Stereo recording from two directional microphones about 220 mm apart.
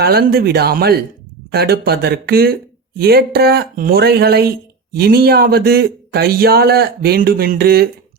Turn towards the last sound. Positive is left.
turn(degrees=-45)  # may be behind; listen again after turning